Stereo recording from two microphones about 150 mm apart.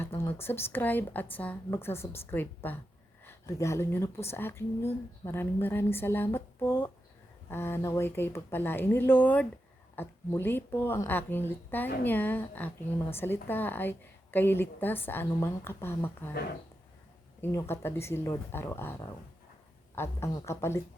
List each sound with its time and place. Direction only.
0.2 s speech: 15° left (ahead or behind)
17.4 s speech: 20° left (ahead or behind)